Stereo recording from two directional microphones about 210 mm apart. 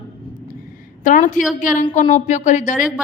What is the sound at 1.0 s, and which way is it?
A woman's voice, 40° left (ahead or behind).